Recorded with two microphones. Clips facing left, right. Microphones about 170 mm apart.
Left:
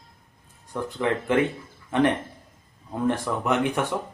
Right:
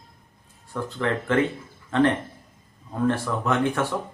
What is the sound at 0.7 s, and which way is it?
Speech, 15° left (ahead or behind).